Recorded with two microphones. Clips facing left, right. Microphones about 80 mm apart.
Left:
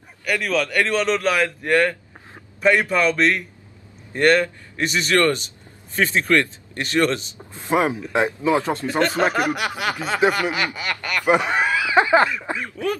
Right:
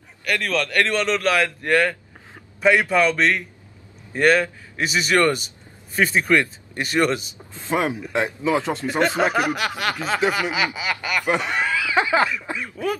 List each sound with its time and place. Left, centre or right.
0.2 s a man's voice: centre
7.3 s speech: centre
8.7 s a man's voice: centre
9.2 s a man's voice: centre
11.2 s speech: centre
12.5 s a man's voice: centre